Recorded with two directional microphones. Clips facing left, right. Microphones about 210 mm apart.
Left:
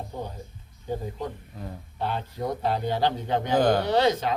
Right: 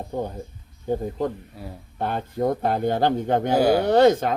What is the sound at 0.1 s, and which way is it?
Speech, 50° right (ahead or behind).